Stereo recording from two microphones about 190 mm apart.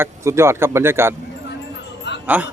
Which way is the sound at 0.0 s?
15° right (ahead or behind).